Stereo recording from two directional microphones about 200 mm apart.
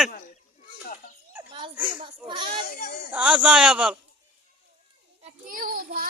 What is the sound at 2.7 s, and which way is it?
Speech, 50° left (ahead or behind).